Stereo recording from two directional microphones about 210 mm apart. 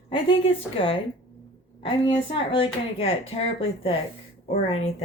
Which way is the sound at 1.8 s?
25° left (ahead or behind).